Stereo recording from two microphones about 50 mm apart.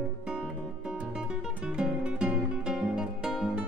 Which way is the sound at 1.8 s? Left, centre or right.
Right.